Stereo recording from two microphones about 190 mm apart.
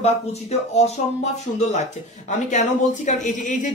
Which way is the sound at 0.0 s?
35° left (ahead or behind).